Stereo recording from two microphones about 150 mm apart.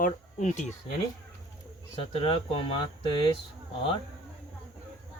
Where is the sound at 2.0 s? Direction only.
35° left (ahead or behind).